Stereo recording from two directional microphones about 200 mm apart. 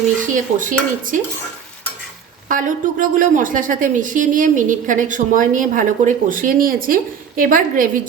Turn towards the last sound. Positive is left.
turn(degrees=-45)  # may be behind; listen again after turning